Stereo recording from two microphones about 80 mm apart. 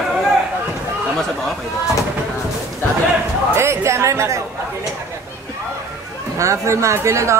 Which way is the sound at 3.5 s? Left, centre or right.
Right.